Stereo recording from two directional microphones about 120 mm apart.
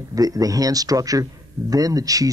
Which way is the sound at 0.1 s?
30° right (ahead or behind).